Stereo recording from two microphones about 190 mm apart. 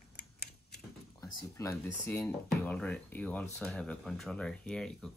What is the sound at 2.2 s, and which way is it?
Speech, 5° left (ahead or behind).